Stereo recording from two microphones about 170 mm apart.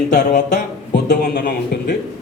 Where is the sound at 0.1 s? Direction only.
50° left (ahead or behind).